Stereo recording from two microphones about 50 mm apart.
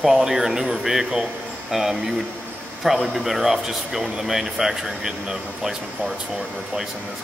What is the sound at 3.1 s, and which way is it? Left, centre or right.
Speech, centre.